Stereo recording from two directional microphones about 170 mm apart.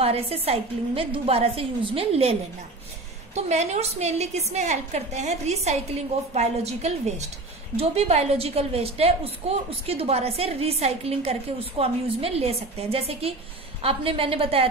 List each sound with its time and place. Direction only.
0.0 s a woman's voice: 35° right (ahead or behind)
3.3 s a woman's voice: 40° right (ahead or behind)